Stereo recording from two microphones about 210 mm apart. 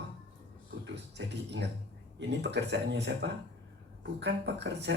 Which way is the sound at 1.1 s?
55° right (ahead or behind).